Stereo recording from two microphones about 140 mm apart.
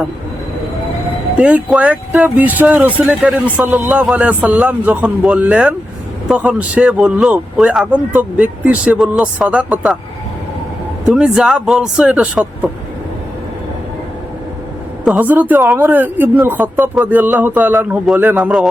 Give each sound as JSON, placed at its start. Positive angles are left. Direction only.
{"t": 1.4, "sound": "speech", "side_deg": -10}
{"t": 11.1, "sound": "speech", "side_deg": -5}
{"t": 15.0, "sound": "speech", "side_deg": -10}